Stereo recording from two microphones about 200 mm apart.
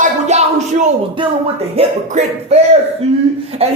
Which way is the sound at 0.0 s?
35° right (ahead or behind).